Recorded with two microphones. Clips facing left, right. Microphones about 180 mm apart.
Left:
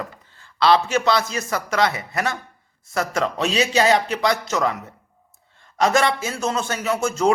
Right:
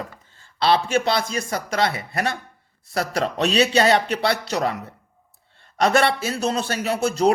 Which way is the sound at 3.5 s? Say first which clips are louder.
Right 1 dB; 35° right (ahead or behind).